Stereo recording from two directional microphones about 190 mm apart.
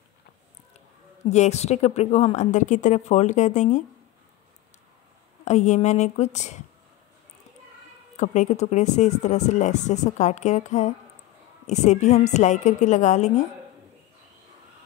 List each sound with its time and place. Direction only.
1.3 s speech: 35° left (ahead or behind)
5.4 s speech: 40° left (ahead or behind)
8.2 s speech: 40° left (ahead or behind)